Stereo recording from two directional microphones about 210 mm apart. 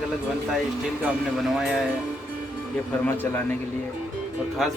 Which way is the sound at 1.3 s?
Centre (ahead or behind).